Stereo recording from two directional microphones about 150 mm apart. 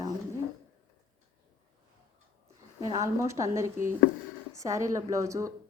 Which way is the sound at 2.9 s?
20° right (ahead or behind).